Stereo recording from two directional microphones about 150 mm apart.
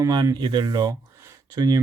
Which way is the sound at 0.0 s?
25° right (ahead or behind).